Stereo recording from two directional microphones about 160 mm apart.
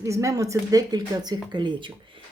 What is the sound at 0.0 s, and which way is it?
Speech, 20° right (ahead or behind).